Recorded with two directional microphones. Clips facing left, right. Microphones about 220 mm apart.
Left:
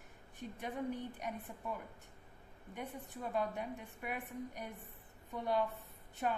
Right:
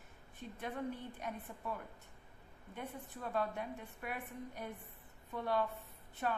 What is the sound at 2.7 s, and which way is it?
A woman's voice, 15° left (ahead or behind).